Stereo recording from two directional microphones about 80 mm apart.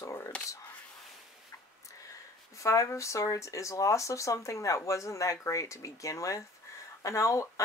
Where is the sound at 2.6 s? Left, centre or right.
Left.